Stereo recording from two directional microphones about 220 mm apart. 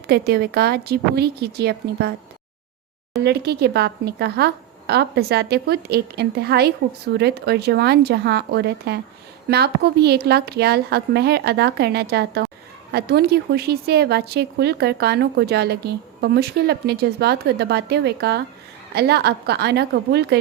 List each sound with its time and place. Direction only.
0.1 s a woman's voice: 45° right (ahead or behind)
3.2 s a woman's voice: 45° right (ahead or behind)